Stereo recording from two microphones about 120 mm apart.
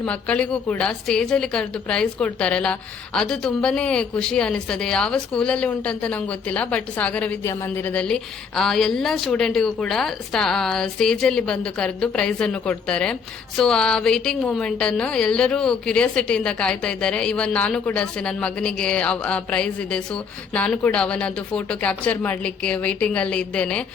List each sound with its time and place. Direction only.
0.0 s a woman's voice: 10° left (ahead or behind)